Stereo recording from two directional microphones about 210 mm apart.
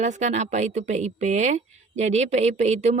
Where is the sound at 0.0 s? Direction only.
35° right (ahead or behind).